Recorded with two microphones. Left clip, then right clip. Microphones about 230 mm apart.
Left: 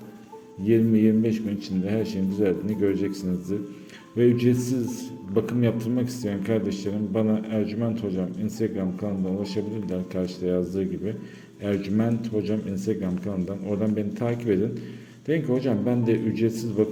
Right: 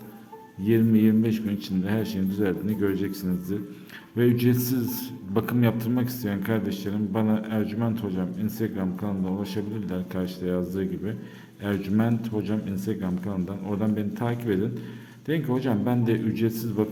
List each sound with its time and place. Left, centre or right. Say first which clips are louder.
0.6 s a man's voice: left 1 dB; centre